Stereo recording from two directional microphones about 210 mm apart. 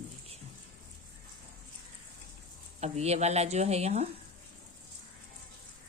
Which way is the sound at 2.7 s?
30° right (ahead or behind).